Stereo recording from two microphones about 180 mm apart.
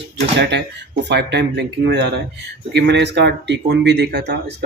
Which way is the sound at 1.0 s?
70° right (ahead or behind).